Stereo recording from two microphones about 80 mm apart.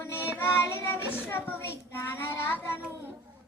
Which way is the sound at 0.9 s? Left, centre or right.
Centre.